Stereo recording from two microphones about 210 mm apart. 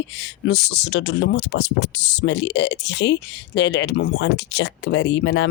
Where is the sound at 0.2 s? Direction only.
55° left (ahead or behind).